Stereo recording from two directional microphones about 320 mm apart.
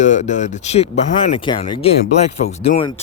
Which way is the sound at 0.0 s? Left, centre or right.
Left.